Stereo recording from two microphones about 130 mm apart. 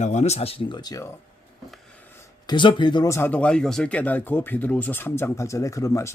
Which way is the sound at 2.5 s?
40° left (ahead or behind).